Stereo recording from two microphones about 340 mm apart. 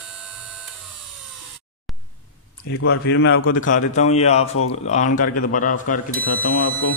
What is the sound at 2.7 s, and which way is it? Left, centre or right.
Speech, left.